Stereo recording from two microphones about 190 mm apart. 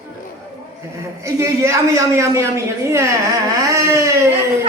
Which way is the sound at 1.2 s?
15° right (ahead or behind).